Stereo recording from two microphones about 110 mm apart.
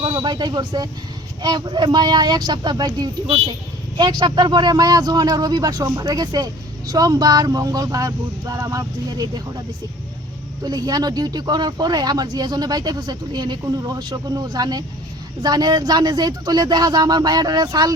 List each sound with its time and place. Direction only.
0.0 s speech: 40° right (ahead or behind)
10.6 s speech: 35° right (ahead or behind)